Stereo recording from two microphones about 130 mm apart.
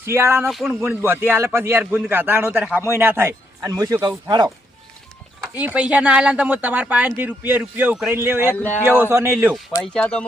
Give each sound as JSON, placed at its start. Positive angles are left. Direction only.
{"t": 0.0, "sound": "speech", "side_deg": -20}
{"t": 0.4, "sound": "speech", "side_deg": 0}
{"t": 0.7, "sound": "a man's voice", "side_deg": -15}
{"t": 5.5, "sound": "a man's voice", "side_deg": -10}
{"t": 9.8, "sound": "speech", "side_deg": 5}